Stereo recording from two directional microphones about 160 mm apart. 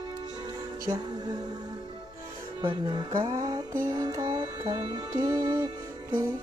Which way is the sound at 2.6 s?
30° right (ahead or behind).